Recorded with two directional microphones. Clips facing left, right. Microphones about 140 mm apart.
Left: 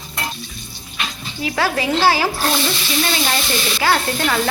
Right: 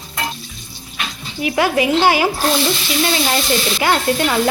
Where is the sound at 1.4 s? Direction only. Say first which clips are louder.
Right 4 dB; 20° right (ahead or behind).